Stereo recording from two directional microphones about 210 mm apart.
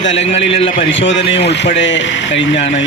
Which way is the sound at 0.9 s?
60° left (ahead or behind).